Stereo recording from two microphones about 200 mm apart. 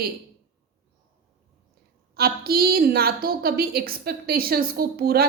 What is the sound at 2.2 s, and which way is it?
A woman's voice, 50° right (ahead or behind).